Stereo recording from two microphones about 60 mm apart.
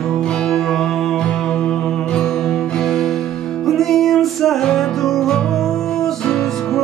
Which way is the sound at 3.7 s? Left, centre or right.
Centre.